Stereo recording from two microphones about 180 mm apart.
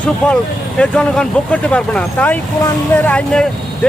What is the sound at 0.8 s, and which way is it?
Speech, 5° left (ahead or behind).